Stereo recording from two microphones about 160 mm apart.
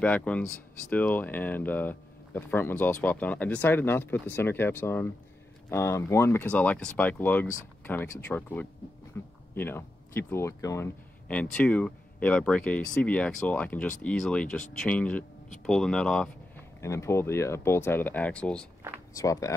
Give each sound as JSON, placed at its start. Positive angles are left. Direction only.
{"t": 0.0, "sound": "speech", "side_deg": 10}
{"t": 11.2, "sound": "speech", "side_deg": 10}
{"t": 16.8, "sound": "speech", "side_deg": 20}
{"t": 19.1, "sound": "speech", "side_deg": 20}